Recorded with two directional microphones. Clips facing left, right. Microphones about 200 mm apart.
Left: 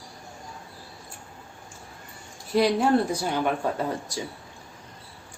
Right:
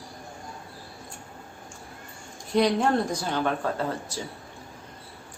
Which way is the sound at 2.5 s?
5° left (ahead or behind).